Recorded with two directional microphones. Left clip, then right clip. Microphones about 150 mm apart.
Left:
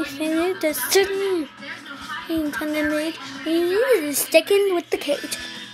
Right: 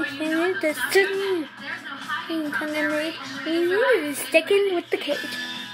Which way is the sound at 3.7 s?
25° left (ahead or behind).